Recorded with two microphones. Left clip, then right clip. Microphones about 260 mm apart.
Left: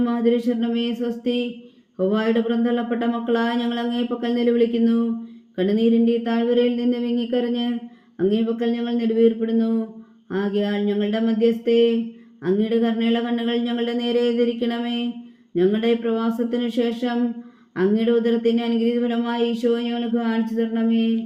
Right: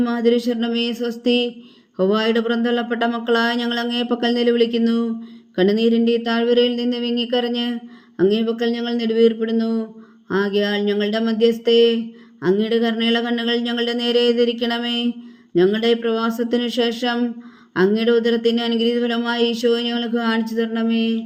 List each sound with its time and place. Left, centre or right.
0.0 s speech: right